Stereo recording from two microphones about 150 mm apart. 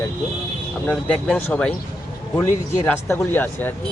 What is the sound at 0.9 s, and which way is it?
Speech, 10° left (ahead or behind).